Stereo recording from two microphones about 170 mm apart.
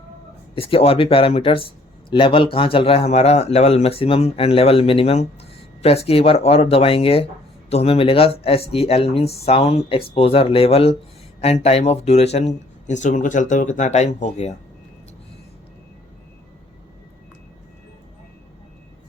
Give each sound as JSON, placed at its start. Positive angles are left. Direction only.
{"t": 0.5, "sound": "speech", "side_deg": 35}